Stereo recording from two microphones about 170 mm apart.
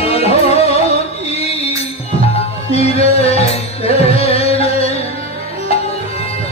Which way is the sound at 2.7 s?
35° left (ahead or behind).